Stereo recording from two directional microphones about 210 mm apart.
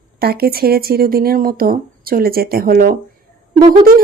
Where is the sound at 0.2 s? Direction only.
45° right (ahead or behind).